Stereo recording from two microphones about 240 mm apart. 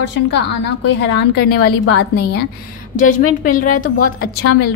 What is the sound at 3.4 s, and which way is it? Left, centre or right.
A woman's voice, left.